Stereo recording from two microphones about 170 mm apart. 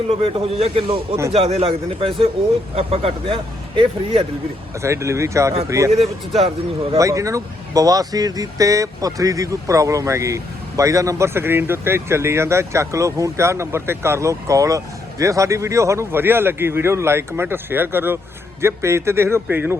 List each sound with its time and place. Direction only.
0.2 s a man's voice: 30° right (ahead or behind)
4.8 s speech: 15° right (ahead or behind)
5.9 s a man's voice: 35° right (ahead or behind)
6.9 s speech: 20° right (ahead or behind)